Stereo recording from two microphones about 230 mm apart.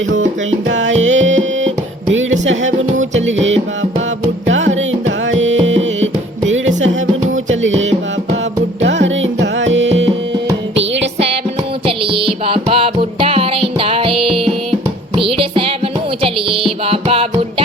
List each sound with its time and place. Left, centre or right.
0.7 s music: right
4.4 s music: right
8.8 s music: right
11.9 s music: right